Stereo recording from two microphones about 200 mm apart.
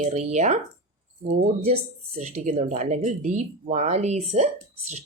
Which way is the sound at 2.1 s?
35° right (ahead or behind).